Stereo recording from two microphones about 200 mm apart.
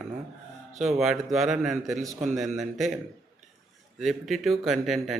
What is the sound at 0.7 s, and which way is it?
Speech, 35° right (ahead or behind).